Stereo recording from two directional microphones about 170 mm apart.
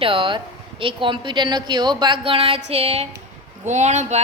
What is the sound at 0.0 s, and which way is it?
A woman's voice, 30° right (ahead or behind).